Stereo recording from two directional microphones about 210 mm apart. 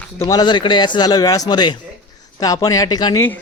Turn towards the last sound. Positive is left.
turn(degrees=20)  # may be behind; listen again after turning